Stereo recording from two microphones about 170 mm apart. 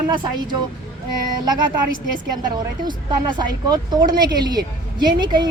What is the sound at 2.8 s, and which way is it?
Speech, 25° right (ahead or behind).